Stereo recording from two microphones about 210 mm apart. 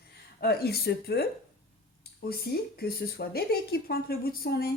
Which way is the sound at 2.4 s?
45° left (ahead or behind).